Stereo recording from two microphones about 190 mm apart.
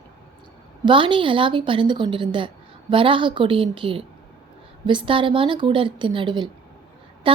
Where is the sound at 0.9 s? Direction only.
25° right (ahead or behind).